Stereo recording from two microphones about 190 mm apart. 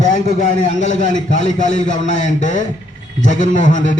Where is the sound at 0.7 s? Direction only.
40° left (ahead or behind).